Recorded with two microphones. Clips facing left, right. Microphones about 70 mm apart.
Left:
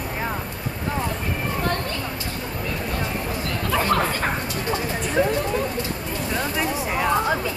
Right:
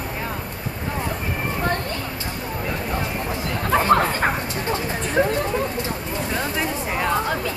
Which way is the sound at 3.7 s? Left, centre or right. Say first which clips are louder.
Right 4 dB; right.